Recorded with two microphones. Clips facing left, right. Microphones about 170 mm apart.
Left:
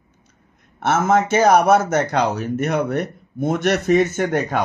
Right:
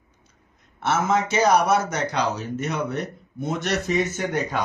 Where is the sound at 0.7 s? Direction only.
50° left (ahead or behind).